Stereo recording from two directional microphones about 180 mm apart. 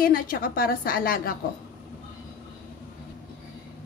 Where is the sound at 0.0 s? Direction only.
55° left (ahead or behind).